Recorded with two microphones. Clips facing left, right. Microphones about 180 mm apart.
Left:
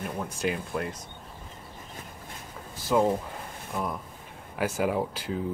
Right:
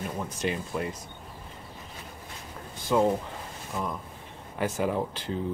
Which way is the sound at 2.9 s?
Centre (ahead or behind).